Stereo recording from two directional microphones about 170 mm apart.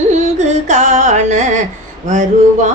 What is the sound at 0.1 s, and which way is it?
Music, 45° right (ahead or behind).